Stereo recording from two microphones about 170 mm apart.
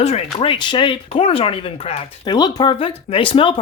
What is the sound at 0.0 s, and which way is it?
Speech, 35° left (ahead or behind).